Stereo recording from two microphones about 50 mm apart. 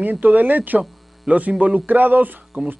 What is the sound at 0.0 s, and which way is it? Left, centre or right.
Speech, right.